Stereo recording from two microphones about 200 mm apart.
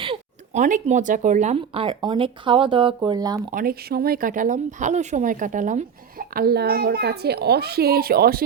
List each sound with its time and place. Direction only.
0.0 s a sound: 25° right (ahead or behind)
0.6 s speech: 40° right (ahead or behind); by 3.4 s 20° right (ahead or behind)
3.5 s speech: 45° right (ahead or behind)